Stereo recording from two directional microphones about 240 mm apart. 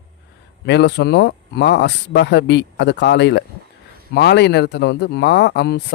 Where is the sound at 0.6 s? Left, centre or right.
Left.